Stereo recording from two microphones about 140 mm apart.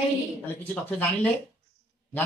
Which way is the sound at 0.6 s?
15° left (ahead or behind).